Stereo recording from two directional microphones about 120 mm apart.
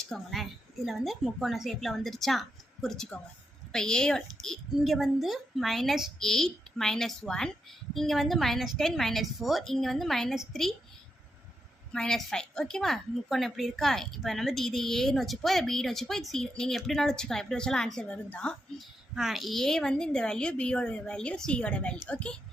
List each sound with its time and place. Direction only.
0.0 s a woman's voice: centre (ahead or behind)
11.9 s a woman's voice: 5° left (ahead or behind)
18.8 s a woman's voice: 5° right (ahead or behind)